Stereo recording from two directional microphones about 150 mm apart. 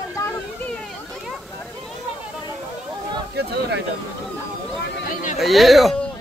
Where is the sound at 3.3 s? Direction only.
90° right.